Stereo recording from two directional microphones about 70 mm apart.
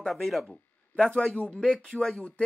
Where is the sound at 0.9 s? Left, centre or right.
Centre.